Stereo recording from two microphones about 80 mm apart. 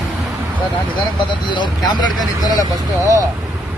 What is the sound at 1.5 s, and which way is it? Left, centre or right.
Speech, left.